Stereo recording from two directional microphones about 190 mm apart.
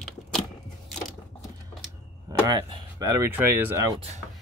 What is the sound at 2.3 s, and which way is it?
Speech, 20° right (ahead or behind).